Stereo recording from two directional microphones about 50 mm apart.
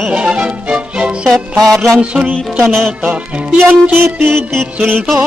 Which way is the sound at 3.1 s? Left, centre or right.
Right.